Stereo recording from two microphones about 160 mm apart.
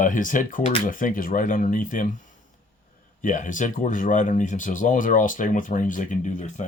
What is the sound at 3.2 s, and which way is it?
Speech, 55° left (ahead or behind).